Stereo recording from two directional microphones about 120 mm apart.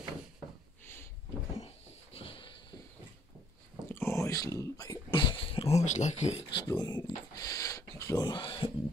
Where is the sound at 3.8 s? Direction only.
20° left (ahead or behind); by 6.2 s 80° left.